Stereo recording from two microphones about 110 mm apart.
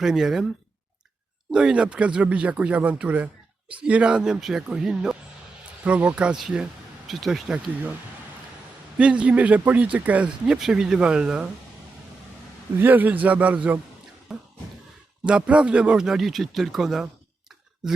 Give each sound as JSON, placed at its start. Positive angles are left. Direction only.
{"t": 0.0, "sound": "speech", "side_deg": -5}
{"t": 1.5, "sound": "speech", "side_deg": -10}
{"t": 9.0, "sound": "speech", "side_deg": -10}
{"t": 12.8, "sound": "speech", "side_deg": -15}
{"t": 14.3, "sound": "music", "side_deg": 0}
{"t": 15.3, "sound": "speech", "side_deg": -10}